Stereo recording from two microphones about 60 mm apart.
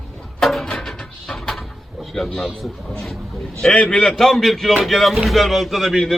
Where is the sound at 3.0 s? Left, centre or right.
Centre.